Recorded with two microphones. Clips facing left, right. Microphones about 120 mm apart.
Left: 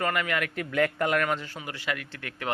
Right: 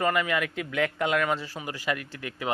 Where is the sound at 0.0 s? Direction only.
20° right (ahead or behind).